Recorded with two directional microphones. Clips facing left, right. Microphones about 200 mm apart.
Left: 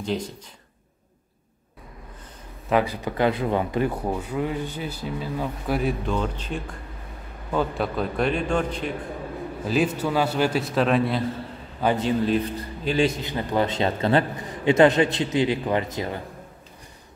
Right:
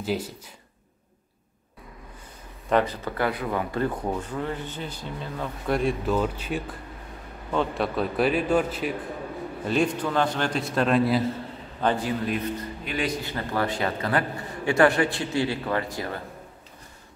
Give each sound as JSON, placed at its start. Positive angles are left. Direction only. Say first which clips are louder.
{"t": 0.0, "sound": "speech", "louder": "left 1 dB", "side_deg": -5}
{"t": 2.7, "sound": "speech", "louder": "left 1 dB", "side_deg": 10}
{"t": 3.8, "sound": "a man's voice", "louder": "left 2 dB", "side_deg": 10}
{"t": 9.7, "sound": "a man's voice", "louder": "left 1 dB", "side_deg": 5}
{"t": 12.0, "sound": "a man's voice", "louder": "left 5 dB", "side_deg": 30}